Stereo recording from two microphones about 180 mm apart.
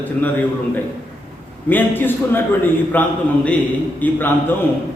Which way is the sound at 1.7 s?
10° left (ahead or behind).